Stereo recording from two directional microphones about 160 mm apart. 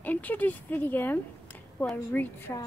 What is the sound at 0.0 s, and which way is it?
Speech, 10° left (ahead or behind).